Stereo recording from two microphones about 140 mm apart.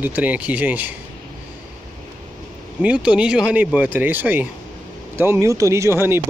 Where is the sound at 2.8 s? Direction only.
5° right (ahead or behind).